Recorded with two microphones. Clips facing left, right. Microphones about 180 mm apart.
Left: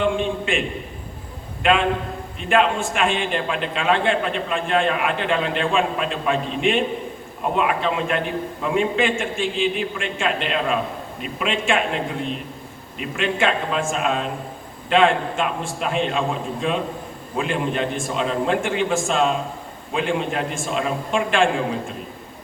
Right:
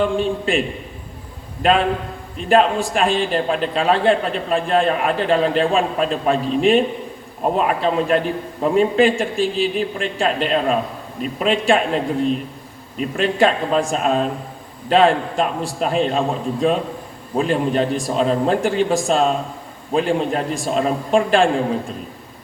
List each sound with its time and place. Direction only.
0.0 s a man's voice: 35° right (ahead or behind)
1.6 s a man's voice: 35° right (ahead or behind)
13.0 s a man's voice: 35° right (ahead or behind)